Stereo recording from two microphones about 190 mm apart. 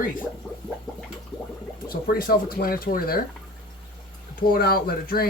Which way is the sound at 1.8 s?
50° left (ahead or behind).